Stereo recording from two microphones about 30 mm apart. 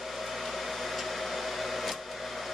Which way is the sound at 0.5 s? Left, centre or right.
Centre.